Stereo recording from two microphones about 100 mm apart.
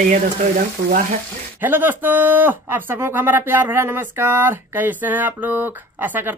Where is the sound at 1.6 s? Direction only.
20° right (ahead or behind).